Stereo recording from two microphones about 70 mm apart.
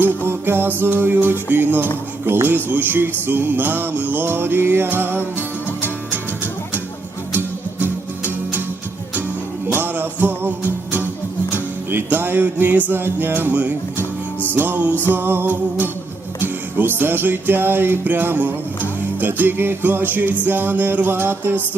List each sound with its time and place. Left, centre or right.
0.3 s music: right
2.2 s speech: right
2.6 s music: right
9.7 s music: right